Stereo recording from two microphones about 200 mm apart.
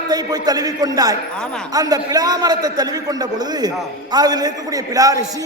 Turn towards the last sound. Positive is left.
turn(degrees=-15)  # may be behind; listen again after turning